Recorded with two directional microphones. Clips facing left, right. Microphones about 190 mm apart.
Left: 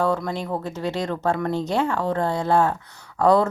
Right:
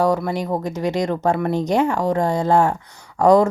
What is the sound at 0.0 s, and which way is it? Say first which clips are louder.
Speech: right 4 dB; 10° right (ahead or behind).